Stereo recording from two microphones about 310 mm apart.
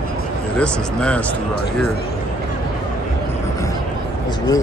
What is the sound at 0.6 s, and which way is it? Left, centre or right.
Speech, centre.